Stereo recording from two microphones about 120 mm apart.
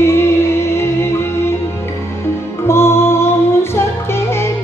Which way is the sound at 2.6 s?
20° left (ahead or behind).